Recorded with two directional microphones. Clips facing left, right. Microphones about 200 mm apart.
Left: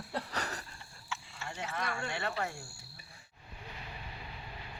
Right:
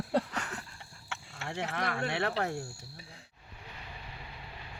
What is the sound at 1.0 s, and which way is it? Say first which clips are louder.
Speech: right 2 dB; 60° right (ahead or behind).